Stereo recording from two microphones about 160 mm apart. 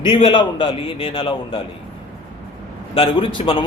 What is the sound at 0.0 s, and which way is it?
A man's voice, 35° left (ahead or behind).